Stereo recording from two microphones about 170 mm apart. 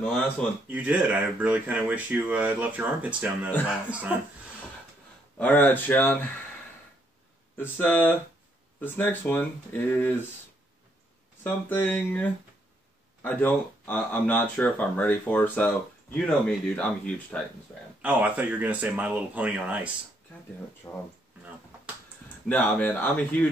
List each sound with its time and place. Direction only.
0.7 s speech: 10° right (ahead or behind)
5.4 s speech: 10° left (ahead or behind)
7.5 s speech: 10° left (ahead or behind)
11.4 s speech: 10° left (ahead or behind)
18.0 s speech: 10° right (ahead or behind)
20.9 s speech: 15° left (ahead or behind)
22.5 s speech: 10° left (ahead or behind)